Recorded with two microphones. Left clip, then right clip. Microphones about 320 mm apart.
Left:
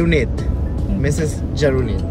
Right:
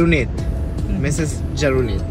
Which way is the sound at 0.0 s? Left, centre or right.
Right.